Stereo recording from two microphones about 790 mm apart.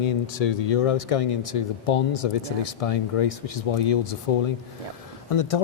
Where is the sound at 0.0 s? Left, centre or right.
Left.